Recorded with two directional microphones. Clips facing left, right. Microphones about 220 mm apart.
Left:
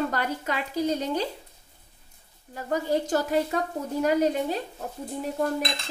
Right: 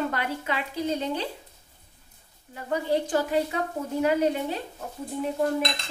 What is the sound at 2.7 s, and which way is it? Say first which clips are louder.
Speech: even; 40° left (ahead or behind).